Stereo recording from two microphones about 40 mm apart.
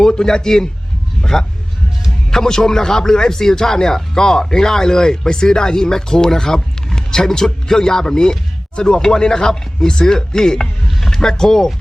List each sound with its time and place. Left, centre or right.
0.0 s speech: centre
1.2 s a sound: centre
2.3 s speech: centre